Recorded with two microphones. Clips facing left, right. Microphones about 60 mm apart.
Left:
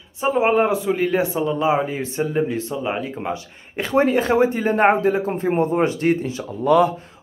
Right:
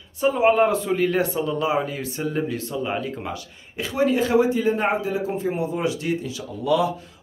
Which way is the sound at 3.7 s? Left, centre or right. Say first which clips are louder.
Left 3 dB; left.